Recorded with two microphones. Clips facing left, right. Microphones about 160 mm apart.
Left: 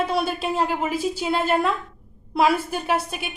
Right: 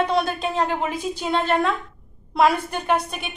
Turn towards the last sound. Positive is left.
turn(degrees=5)  # may be behind; listen again after turning